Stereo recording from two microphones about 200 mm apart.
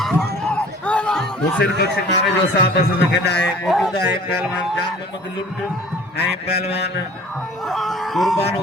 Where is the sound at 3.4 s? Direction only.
Centre (ahead or behind).